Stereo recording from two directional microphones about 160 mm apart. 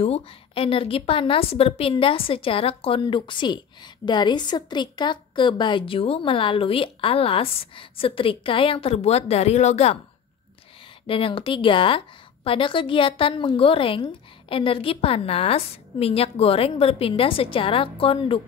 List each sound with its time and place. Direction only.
0.0 s a woman's voice: 35° left (ahead or behind)
11.1 s a woman's voice: 35° left (ahead or behind)